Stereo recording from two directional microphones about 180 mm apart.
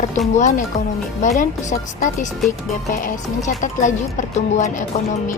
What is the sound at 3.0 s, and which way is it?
Speech, 45° left (ahead or behind).